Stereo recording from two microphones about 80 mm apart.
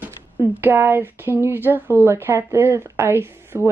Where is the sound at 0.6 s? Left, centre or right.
Right.